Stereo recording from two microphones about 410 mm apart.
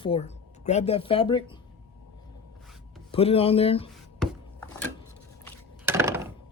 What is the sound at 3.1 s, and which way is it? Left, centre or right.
Speech, centre.